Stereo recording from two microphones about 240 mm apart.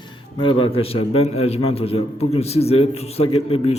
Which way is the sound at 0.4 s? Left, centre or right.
Left.